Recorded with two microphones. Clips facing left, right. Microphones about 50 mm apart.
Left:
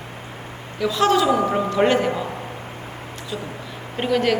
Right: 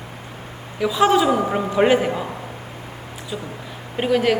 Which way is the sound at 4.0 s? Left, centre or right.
Centre.